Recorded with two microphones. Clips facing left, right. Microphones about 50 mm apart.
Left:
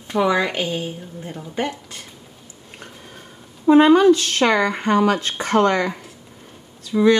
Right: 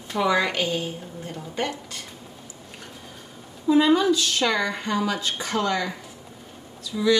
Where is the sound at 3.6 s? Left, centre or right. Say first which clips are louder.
Left 7 dB; left.